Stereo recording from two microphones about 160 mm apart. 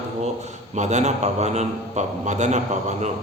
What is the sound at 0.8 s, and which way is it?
A man's voice, 45° right (ahead or behind).